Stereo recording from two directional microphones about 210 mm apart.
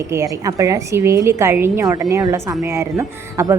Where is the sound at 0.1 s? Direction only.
15° right (ahead or behind).